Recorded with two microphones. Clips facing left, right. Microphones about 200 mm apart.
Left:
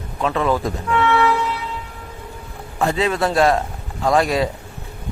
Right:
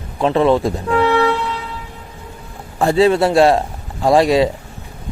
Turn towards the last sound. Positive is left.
turn(degrees=-25)  # may be behind; listen again after turning